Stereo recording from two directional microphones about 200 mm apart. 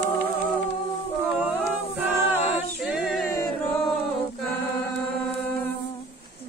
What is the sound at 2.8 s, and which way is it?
Music, centre (ahead or behind).